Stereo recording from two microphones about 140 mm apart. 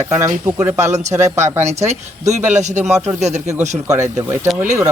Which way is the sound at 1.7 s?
55° right (ahead or behind).